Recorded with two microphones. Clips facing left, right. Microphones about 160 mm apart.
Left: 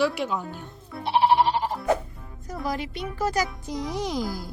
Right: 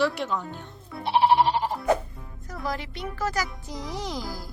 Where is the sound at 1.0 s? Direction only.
Centre (ahead or behind).